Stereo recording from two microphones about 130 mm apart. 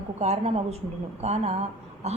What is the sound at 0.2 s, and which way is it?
A woman's voice, 55° right (ahead or behind).